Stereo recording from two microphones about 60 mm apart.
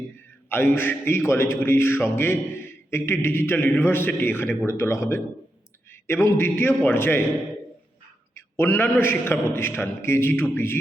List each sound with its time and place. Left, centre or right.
0.4 s a man's voice: left
8.4 s a man's voice: left